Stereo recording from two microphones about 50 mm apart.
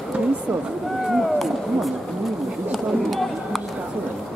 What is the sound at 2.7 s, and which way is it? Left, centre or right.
Run, centre.